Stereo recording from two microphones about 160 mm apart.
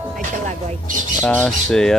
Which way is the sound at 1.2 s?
5° left (ahead or behind).